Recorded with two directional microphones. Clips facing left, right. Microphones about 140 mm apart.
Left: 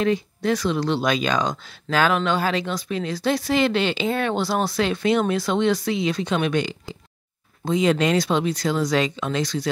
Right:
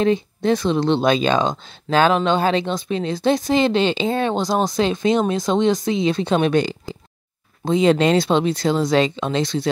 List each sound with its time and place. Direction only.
0.0 s speech: 25° right (ahead or behind)